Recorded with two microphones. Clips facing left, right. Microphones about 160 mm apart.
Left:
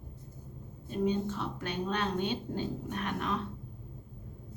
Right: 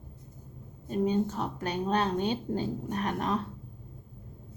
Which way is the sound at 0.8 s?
40° right (ahead or behind).